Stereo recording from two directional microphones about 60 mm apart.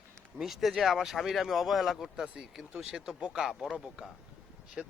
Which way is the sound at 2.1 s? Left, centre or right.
Centre.